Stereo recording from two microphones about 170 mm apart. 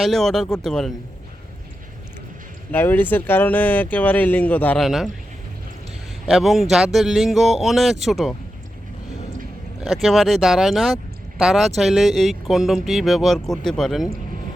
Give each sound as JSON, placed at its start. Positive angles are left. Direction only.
{"t": 0.0, "sound": "speech", "side_deg": 0}
{"t": 2.7, "sound": "speech", "side_deg": 10}
{"t": 4.9, "sound": "speech", "side_deg": 0}
{"t": 6.2, "sound": "speech", "side_deg": 0}
{"t": 9.8, "sound": "speech", "side_deg": 0}